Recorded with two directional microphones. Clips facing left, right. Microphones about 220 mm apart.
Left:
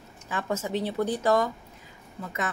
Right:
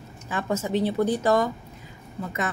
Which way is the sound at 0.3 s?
30° right (ahead or behind).